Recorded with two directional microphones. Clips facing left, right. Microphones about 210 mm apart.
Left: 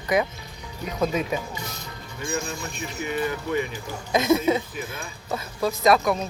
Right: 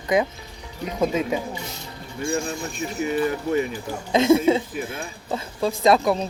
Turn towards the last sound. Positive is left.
turn(degrees=-30)  # may be behind; listen again after turning